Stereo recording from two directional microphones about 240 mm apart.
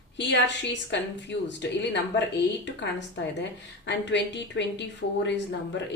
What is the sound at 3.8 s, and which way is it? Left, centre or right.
Speech, left.